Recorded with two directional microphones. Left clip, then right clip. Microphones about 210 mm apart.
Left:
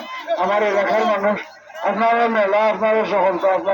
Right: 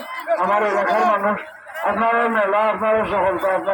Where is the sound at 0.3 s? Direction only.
50° left (ahead or behind).